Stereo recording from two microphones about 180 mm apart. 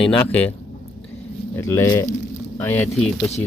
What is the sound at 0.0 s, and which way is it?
Speech, 10° left (ahead or behind).